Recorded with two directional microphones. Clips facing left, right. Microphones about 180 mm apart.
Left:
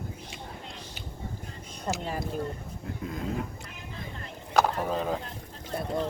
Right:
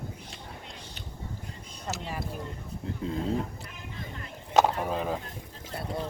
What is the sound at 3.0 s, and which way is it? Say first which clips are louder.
Speech: right 4 dB; 30° right (ahead or behind).